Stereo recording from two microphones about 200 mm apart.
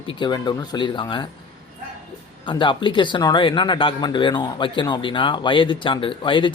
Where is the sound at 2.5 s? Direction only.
25° left (ahead or behind).